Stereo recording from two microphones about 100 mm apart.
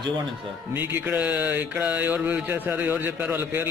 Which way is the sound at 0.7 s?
20° right (ahead or behind).